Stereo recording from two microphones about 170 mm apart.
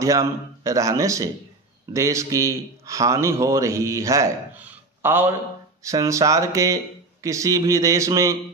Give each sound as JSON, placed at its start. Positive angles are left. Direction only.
{"t": 0.0, "sound": "speech", "side_deg": -20}